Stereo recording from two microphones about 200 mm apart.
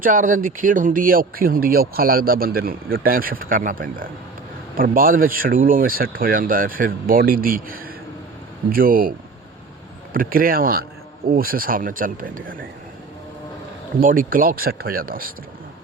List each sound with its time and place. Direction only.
0.0 s speech: 45° right (ahead or behind)
14.0 s speech: 45° right (ahead or behind)